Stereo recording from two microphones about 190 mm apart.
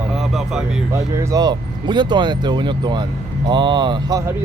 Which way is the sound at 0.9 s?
15° right (ahead or behind).